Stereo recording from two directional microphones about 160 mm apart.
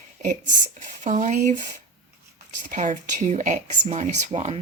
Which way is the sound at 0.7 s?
55° right (ahead or behind).